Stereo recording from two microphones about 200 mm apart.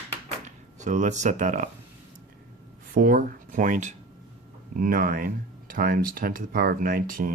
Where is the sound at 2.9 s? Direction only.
45° right (ahead or behind).